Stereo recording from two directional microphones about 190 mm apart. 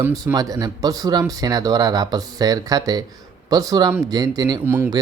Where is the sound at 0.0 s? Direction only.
15° right (ahead or behind).